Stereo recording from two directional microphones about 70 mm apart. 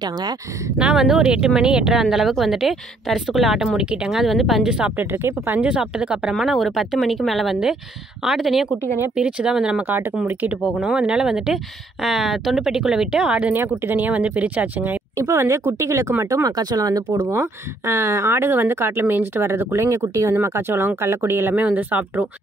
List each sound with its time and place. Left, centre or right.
0.0 s speech: right
0.7 s speech: centre
4.9 s speech: right
5.6 s speech: centre
6.3 s speech: centre
9.1 s speech: centre
9.8 s speech: right
10.8 s speech: centre
15.3 s speech: right
16.4 s speech: right
17.3 s speech: right